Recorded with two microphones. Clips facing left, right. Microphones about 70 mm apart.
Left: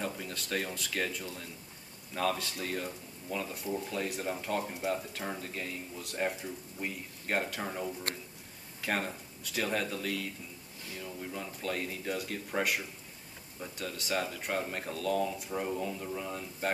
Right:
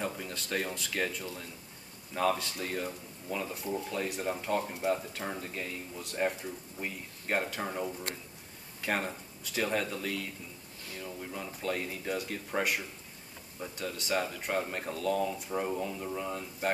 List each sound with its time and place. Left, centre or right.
0.0 s speech: centre